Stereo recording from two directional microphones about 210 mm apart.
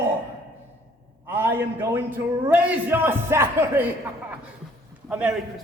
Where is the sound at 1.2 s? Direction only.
10° right (ahead or behind).